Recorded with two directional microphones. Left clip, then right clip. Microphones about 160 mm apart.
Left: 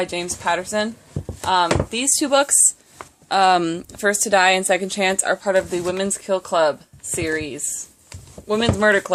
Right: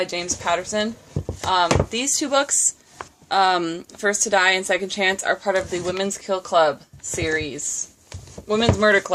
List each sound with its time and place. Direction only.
0.0 s a woman's voice: 40° left (ahead or behind)
1.6 s speech: centre (ahead or behind)
1.9 s a woman's voice: 45° left (ahead or behind)